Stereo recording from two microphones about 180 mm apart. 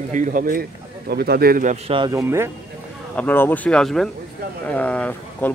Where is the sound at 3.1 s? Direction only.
10° left (ahead or behind).